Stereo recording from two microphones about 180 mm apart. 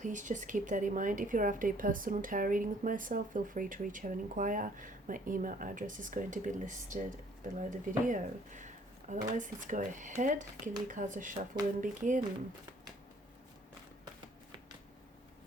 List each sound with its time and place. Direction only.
0.0 s a woman's voice: 45° right (ahead or behind)